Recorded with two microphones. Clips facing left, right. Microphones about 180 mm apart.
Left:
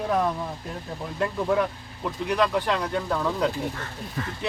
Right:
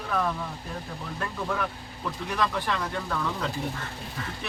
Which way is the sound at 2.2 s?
15° left (ahead or behind).